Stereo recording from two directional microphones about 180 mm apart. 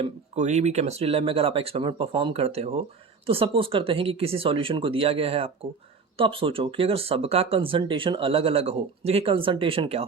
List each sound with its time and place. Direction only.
0.0 s speech: 40° right (ahead or behind)